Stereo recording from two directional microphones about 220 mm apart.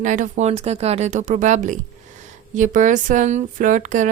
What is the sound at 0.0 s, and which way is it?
Speech, 35° right (ahead or behind).